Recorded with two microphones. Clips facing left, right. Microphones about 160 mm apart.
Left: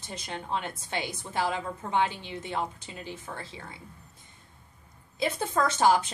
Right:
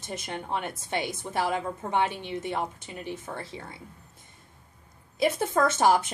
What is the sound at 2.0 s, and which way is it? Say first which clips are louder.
Speech: even; 60° right (ahead or behind).